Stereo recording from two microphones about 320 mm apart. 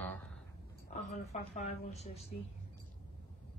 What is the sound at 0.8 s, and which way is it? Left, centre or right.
Speech, left.